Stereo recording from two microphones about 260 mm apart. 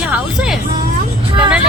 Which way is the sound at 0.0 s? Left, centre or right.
Centre.